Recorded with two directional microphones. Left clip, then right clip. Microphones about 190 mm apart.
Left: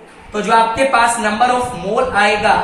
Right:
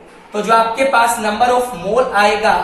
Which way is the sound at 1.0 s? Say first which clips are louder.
Left 1 dB; 10° left (ahead or behind).